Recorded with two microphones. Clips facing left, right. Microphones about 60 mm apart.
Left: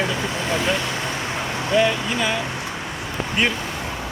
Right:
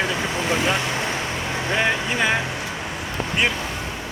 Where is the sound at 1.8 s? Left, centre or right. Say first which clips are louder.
Left 2 dB; right.